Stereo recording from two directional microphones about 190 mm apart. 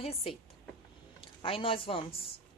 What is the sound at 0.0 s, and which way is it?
A woman's voice, 30° left (ahead or behind).